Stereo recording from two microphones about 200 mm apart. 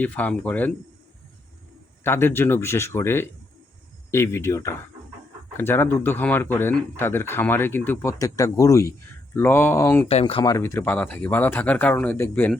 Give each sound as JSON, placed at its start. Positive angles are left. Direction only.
{"t": 0.0, "sound": "speech", "side_deg": 5}
{"t": 2.0, "sound": "speech", "side_deg": 10}
{"t": 10.1, "sound": "speech", "side_deg": 30}